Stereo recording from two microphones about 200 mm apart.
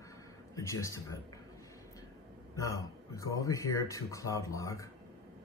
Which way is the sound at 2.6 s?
15° left (ahead or behind).